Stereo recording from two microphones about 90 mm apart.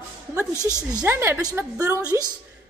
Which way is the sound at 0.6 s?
45° right (ahead or behind).